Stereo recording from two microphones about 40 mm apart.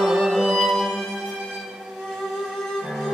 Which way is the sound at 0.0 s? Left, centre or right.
Centre.